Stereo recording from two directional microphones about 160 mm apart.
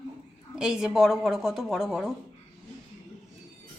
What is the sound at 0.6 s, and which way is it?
A woman's voice, 5° right (ahead or behind).